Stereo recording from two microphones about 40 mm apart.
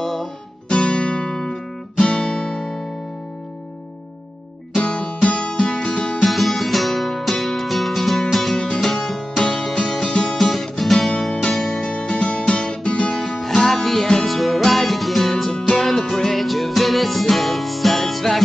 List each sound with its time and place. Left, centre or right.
0.0 s music: centre
0.7 s guitar: left
1.4 s music: centre
4.7 s music: left
6.2 s music: centre
8.5 s music: left
8.8 s music: centre
9.4 s music: centre
10.3 s music: centre
11.8 s music: left
13.1 s music: centre